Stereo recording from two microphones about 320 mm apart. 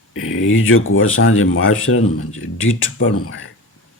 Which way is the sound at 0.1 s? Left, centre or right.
Left.